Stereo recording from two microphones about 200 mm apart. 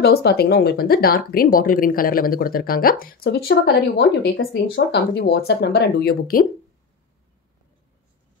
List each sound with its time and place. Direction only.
0.0 s speech: 55° left (ahead or behind)